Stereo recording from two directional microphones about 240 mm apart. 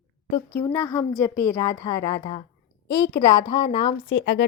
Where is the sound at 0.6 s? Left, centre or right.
Centre.